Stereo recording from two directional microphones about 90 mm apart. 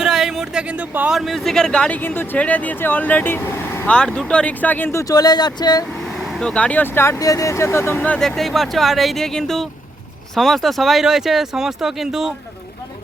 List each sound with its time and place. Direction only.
0.0 s a sound: 5° right (ahead or behind)
1.1 s speech: centre (ahead or behind); by 3.8 s 25° left (ahead or behind)
3.8 s speech: 10° left (ahead or behind); by 5.1 s 30° left (ahead or behind)
5.1 s speech: 50° left (ahead or behind)
5.9 s speech: centre (ahead or behind); by 7.2 s 25° left (ahead or behind)
7.2 s speech: 40° left (ahead or behind); by 8.2 s 20° left (ahead or behind)
8.2 s speech: centre (ahead or behind)